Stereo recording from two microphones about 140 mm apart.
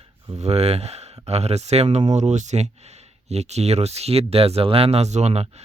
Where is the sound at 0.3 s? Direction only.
50° right (ahead or behind).